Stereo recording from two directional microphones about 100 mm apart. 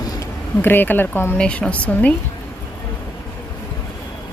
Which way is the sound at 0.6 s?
20° left (ahead or behind).